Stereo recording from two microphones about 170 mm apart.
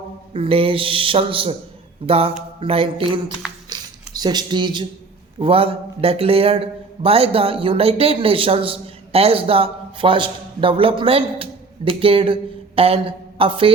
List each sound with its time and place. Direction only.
0.3 s a man's voice: 30° right (ahead or behind)
3.7 s a sound: 25° right (ahead or behind)
5.4 s a man's voice: 30° right (ahead or behind)